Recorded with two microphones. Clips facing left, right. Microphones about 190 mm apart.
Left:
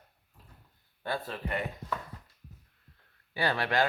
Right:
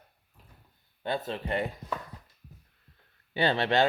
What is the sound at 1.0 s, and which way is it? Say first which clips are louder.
Speech: right 3 dB; 20° right (ahead or behind).